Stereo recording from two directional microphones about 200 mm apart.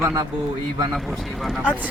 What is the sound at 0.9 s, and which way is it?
Speech, centre (ahead or behind).